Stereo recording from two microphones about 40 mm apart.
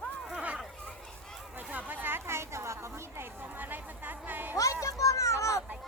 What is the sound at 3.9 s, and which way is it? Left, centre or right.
Music, right.